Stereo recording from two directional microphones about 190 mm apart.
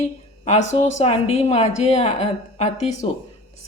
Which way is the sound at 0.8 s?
35° left (ahead or behind).